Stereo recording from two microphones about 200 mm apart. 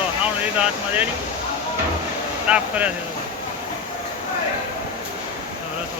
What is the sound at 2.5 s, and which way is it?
Speech, 5° right (ahead or behind).